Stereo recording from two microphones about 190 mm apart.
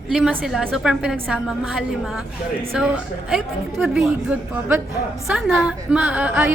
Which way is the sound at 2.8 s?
5° right (ahead or behind).